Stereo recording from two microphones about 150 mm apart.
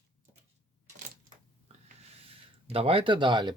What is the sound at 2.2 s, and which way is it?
Speech, 40° right (ahead or behind).